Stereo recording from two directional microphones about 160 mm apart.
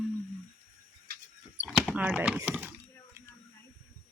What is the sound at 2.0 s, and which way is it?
Speech, 10° right (ahead or behind).